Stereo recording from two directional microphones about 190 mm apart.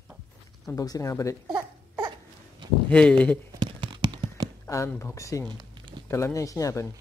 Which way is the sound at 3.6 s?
25° right (ahead or behind).